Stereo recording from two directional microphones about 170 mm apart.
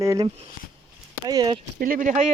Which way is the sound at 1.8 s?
50° right (ahead or behind).